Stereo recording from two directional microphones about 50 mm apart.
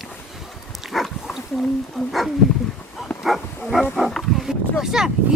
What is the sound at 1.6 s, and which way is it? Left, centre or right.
Speech, centre.